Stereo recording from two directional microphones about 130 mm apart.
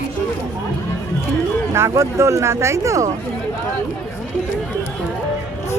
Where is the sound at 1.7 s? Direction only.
20° right (ahead or behind).